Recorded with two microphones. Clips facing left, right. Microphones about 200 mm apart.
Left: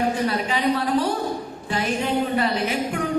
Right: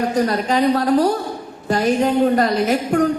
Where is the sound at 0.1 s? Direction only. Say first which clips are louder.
Right 5 dB; 40° right (ahead or behind).